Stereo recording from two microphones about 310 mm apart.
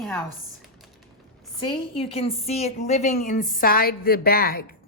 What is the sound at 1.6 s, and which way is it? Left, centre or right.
A woman's voice, centre.